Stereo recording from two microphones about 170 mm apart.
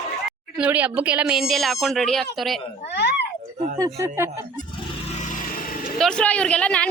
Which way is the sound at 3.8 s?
20° right (ahead or behind).